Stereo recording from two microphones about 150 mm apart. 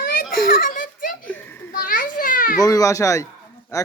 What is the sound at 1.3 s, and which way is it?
Children playing, 10° left (ahead or behind).